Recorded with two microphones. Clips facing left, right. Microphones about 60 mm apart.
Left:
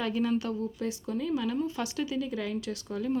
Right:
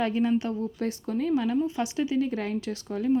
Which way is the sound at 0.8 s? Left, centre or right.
Right.